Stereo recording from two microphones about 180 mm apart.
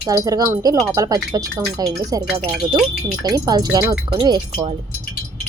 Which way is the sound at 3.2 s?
20° right (ahead or behind).